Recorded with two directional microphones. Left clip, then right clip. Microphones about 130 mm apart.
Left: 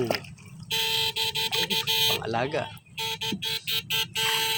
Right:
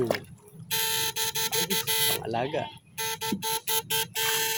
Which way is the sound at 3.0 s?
30° right (ahead or behind).